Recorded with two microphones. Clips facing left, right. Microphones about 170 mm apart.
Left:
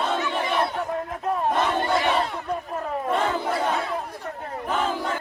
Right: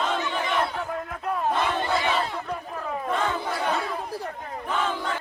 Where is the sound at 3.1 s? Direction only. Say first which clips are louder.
Left 3 dB; 30° left (ahead or behind).